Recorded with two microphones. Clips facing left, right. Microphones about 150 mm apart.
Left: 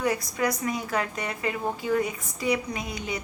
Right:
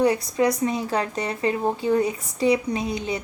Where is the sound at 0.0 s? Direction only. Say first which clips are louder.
Right 6 dB; 25° right (ahead or behind).